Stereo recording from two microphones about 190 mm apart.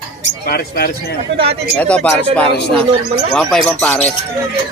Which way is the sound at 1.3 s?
30° right (ahead or behind).